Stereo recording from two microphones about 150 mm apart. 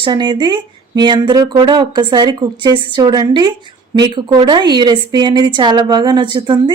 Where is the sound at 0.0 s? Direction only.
30° right (ahead or behind).